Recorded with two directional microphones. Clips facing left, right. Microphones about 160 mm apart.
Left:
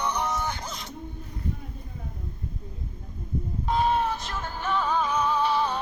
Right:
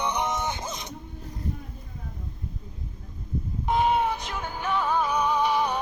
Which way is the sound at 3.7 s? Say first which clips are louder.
Right 1 dB; 15° right (ahead or behind).